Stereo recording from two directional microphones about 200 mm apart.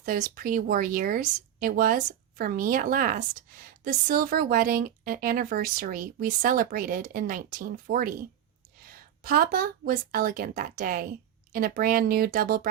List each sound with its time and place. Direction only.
0.0 s speech: 45° right (ahead or behind)